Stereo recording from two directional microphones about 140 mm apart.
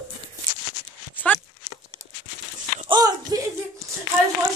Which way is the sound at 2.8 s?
30° right (ahead or behind).